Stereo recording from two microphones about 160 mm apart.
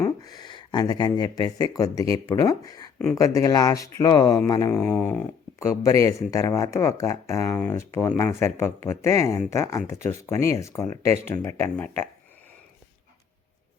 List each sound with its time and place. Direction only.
0.0 s speech: 25° left (ahead or behind)